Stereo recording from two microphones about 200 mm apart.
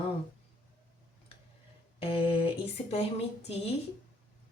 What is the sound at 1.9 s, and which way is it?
Speech, 30° left (ahead or behind).